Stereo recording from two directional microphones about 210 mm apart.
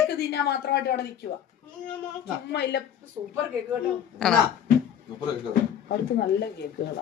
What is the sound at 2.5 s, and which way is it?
Speech, 55° left (ahead or behind).